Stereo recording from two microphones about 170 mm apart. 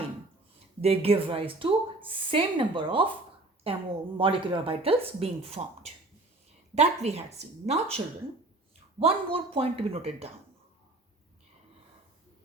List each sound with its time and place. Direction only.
0.8 s speech: 35° right (ahead or behind)